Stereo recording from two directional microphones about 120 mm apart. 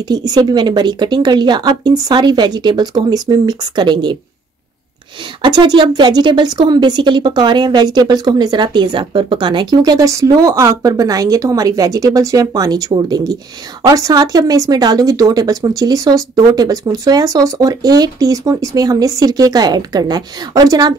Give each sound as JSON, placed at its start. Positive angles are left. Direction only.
{"t": 0.1, "sound": "speech", "side_deg": -35}
{"t": 5.4, "sound": "speech", "side_deg": -40}